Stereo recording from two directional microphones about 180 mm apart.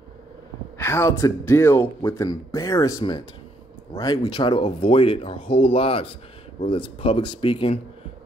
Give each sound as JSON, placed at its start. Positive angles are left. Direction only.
{"t": 0.7, "sound": "speech", "side_deg": 15}